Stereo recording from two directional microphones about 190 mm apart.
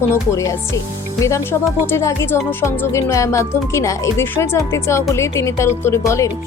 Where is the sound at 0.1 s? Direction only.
15° left (ahead or behind).